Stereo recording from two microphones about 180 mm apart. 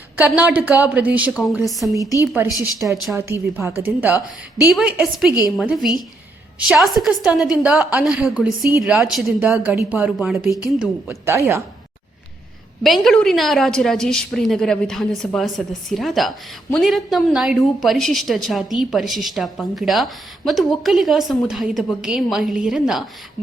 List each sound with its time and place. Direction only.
0.2 s a woman's voice: 10° right (ahead or behind)
3.2 s a woman's voice: 15° right (ahead or behind)
10.8 s a woman's voice: 15° right (ahead or behind)
12.8 s speech: centre (ahead or behind)